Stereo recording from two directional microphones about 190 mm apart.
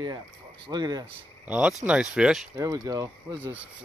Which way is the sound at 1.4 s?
5° right (ahead or behind).